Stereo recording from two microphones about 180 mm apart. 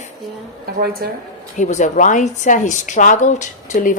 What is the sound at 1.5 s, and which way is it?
A woman's voice, 40° left (ahead or behind).